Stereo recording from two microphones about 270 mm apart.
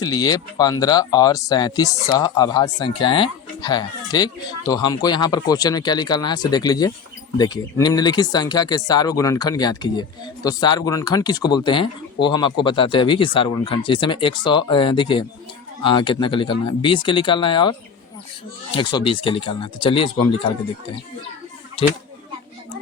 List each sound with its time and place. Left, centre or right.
0.0 s speech: centre
21.8 s speech: centre